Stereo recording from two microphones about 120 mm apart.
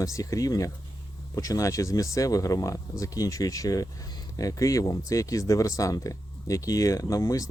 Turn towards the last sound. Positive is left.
turn(degrees=30)  # may be behind; listen again after turning